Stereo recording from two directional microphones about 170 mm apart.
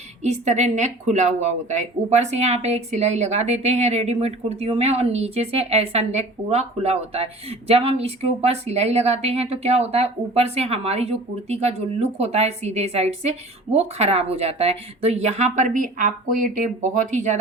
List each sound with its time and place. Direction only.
0.2 s a woman's voice: 40° right (ahead or behind)